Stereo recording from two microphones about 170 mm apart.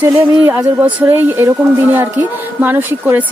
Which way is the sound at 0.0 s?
10° right (ahead or behind).